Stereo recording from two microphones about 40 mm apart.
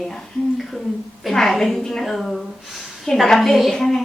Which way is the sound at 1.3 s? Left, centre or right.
Centre.